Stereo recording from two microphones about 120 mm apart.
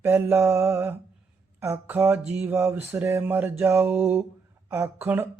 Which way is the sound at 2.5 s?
20° right (ahead or behind).